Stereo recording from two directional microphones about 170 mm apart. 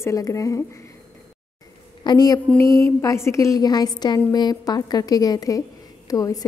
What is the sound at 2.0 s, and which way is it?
A woman's voice, 25° left (ahead or behind).